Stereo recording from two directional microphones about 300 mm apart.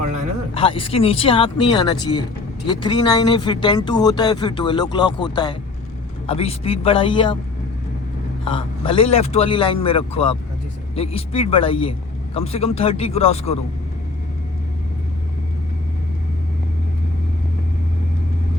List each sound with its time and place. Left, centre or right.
0.5 s speech: centre
8.4 s speech: centre